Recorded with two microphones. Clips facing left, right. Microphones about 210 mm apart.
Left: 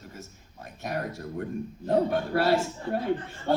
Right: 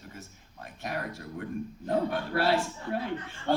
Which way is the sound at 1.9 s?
45° left (ahead or behind).